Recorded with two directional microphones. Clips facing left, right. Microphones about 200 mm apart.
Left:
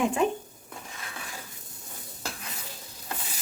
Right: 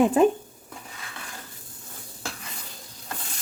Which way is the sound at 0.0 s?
35° right (ahead or behind).